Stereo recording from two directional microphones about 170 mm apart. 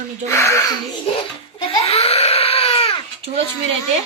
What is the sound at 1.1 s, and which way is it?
Speech, 35° left (ahead or behind).